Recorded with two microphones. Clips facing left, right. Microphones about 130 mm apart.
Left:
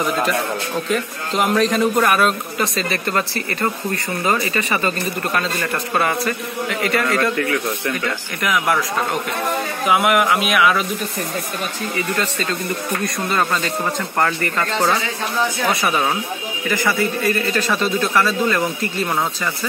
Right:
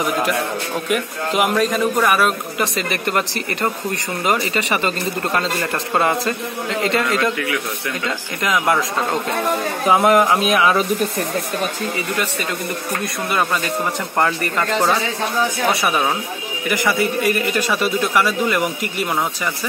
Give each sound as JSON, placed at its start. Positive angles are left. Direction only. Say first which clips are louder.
{"t": 0.8, "sound": "a man's voice", "louder": "right 1 dB", "side_deg": -10}
{"t": 3.1, "sound": "speech", "louder": "right 1 dB", "side_deg": -20}
{"t": 9.8, "sound": "speech", "louder": "right 2 dB", "side_deg": -35}
{"t": 14.1, "sound": "a man's voice", "louder": "right 1 dB", "side_deg": -20}